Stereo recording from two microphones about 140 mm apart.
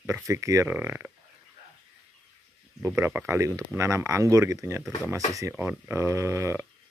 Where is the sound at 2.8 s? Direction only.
15° right (ahead or behind).